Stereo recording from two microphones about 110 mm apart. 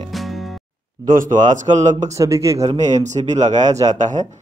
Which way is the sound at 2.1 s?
30° right (ahead or behind).